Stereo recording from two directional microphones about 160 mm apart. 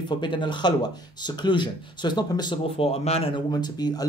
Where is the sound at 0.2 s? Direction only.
30° left (ahead or behind).